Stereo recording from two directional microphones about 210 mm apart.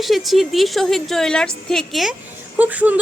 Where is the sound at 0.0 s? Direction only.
Centre (ahead or behind).